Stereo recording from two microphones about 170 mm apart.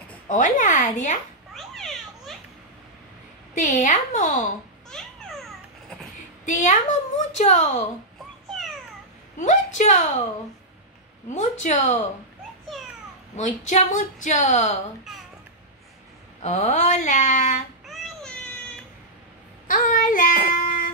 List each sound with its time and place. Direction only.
0.3 s a woman's voice: 50° left (ahead or behind)
1.5 s a sound: centre (ahead or behind)
3.5 s a woman's voice: 50° left (ahead or behind)
4.9 s babbling: 5° left (ahead or behind)
6.4 s a woman's voice: 45° left (ahead or behind)
9.4 s a woman's voice: 45° left (ahead or behind)
11.2 s a woman's voice: 45° left (ahead or behind)
13.4 s a woman's voice: 45° left (ahead or behind)
16.4 s a woman's voice: 40° left (ahead or behind)
17.8 s a sound: centre (ahead or behind)
19.7 s child singing: 50° left (ahead or behind)